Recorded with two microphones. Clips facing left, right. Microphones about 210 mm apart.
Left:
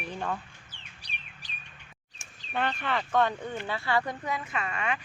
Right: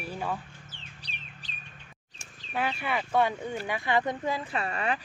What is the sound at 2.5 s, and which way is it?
Speech, 10° right (ahead or behind).